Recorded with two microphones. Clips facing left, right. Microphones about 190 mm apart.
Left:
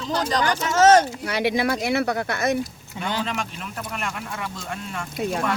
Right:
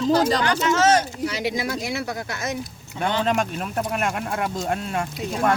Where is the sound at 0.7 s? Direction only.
50° left (ahead or behind).